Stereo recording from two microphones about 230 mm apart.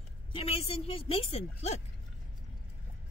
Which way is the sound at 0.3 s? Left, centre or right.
Left.